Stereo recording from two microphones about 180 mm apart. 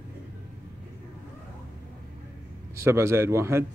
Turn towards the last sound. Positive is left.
turn(degrees=-15)  # may be behind; listen again after turning